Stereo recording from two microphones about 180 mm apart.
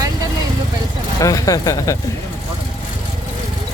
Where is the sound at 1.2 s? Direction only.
20° left (ahead or behind).